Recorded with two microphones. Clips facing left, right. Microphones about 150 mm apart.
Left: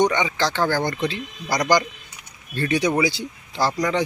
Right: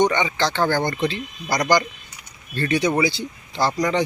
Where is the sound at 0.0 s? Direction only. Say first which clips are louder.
Right 1 dB; 10° left (ahead or behind).